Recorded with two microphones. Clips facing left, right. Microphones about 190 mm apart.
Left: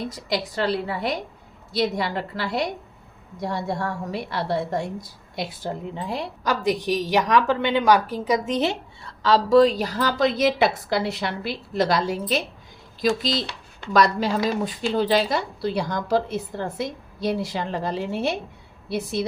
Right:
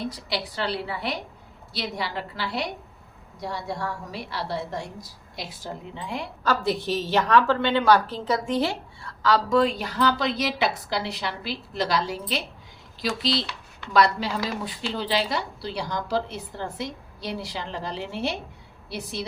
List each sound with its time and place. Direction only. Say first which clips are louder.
0.3 s a woman's voice: left 7 dB; 45° left (ahead or behind)
6.4 s a woman's voice: left 1 dB; 15° left (ahead or behind); by 19.2 s 50° left (ahead or behind)